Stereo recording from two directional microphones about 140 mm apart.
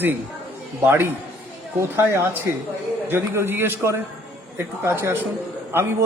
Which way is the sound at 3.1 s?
15° right (ahead or behind).